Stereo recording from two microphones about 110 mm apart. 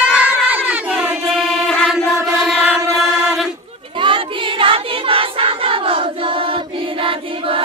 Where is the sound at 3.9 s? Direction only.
50° right (ahead or behind).